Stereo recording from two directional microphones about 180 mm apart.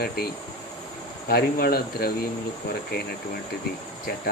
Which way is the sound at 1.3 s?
60° left (ahead or behind).